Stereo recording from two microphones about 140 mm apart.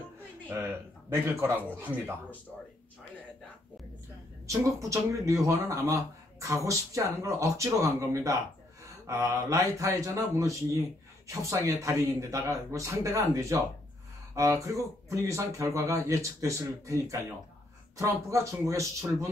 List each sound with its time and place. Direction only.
1.1 s speech: 15° right (ahead or behind)
4.5 s speech: 20° right (ahead or behind)